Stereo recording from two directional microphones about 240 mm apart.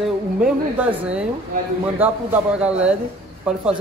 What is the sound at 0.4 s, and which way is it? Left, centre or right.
A woman's voice, centre.